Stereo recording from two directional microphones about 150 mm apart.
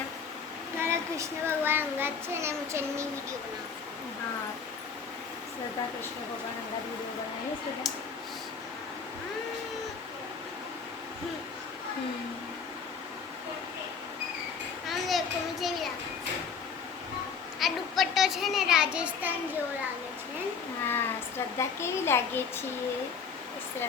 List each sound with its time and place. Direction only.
0.8 s a child's voice: 20° right (ahead or behind)
14.8 s a sound: centre (ahead or behind)
17.6 s a child's voice: centre (ahead or behind)
20.8 s a woman's voice: 15° left (ahead or behind)